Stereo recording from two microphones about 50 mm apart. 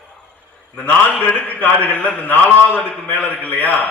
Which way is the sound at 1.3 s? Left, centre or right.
Left.